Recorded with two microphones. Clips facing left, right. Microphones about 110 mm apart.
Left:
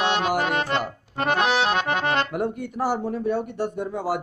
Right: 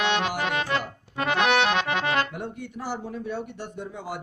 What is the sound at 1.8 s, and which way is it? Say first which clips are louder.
Accordion: left 2 dB; 50° left (ahead or behind).